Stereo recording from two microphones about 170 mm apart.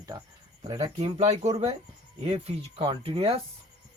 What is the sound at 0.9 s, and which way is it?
Speech, 40° right (ahead or behind).